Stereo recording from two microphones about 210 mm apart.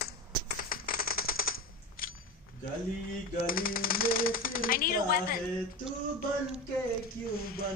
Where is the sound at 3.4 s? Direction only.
45° left (ahead or behind).